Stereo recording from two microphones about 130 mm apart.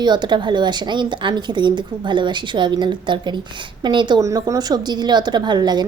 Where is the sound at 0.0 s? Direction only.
35° right (ahead or behind).